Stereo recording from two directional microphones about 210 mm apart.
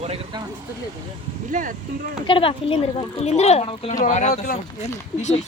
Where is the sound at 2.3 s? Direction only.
25° left (ahead or behind).